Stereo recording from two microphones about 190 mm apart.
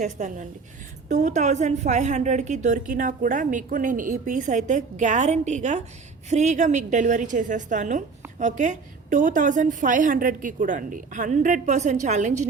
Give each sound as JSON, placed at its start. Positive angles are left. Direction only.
{"t": 0.0, "sound": "a woman's voice", "side_deg": -40}